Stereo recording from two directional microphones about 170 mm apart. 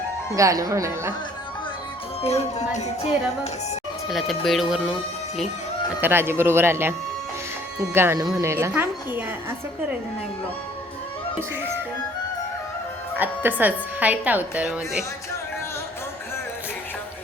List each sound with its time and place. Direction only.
0.3 s speech: 20° right (ahead or behind)
2.2 s speech: 40° left (ahead or behind)
4.4 s speech: centre (ahead or behind)
6.0 s a woman's voice: 15° right (ahead or behind)
13.1 s a woman's voice: 10° right (ahead or behind)